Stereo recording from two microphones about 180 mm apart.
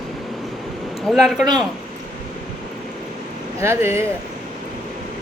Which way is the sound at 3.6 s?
15° right (ahead or behind).